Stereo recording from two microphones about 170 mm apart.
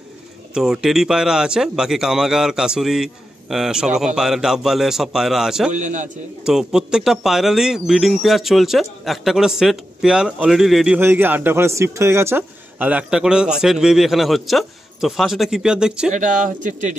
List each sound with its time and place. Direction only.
0.6 s speech: centre (ahead or behind)
5.7 s a man's voice: 45° right (ahead or behind)
6.4 s a man's voice: 5° right (ahead or behind)
16.1 s a man's voice: 50° right (ahead or behind)